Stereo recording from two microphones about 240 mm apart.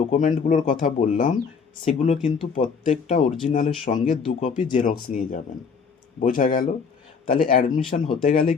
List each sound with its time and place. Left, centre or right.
0.1 s speech: left
7.8 s speech: left